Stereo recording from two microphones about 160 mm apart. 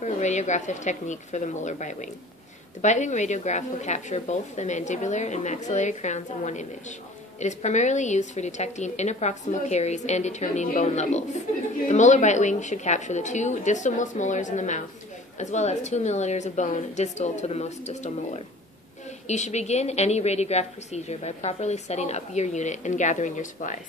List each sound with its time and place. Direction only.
0.0 s a woman's voice: 45° left (ahead or behind)